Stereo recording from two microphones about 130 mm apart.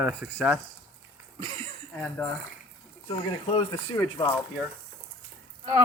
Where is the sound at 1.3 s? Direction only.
40° right (ahead or behind).